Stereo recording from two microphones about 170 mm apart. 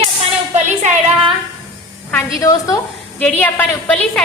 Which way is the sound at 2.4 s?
20° left (ahead or behind).